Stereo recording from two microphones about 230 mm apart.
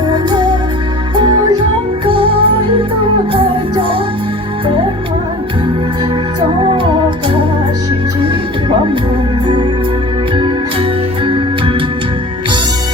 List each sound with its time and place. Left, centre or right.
0.1 s music: centre
2.0 s music: right
6.7 s music: right
10.3 s music: right